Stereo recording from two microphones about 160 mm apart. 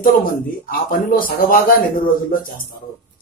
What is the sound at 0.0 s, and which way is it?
A man's voice, 65° left (ahead or behind).